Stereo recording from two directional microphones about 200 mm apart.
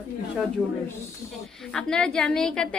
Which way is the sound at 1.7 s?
5° left (ahead or behind).